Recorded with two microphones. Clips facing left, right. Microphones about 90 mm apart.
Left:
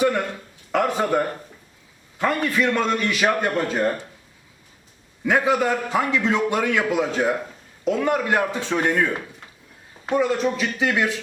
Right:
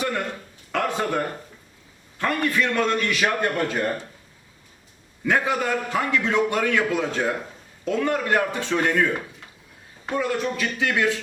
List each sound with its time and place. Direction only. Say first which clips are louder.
0.7 s a man's voice: left 4 dB; 15° left (ahead or behind)
5.2 s a man's voice: left 3 dB; 15° left (ahead or behind)
10.1 s a man's voice: left 4 dB; 15° left (ahead or behind)